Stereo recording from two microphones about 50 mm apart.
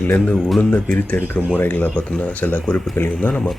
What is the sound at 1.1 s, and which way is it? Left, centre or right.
Speech, left.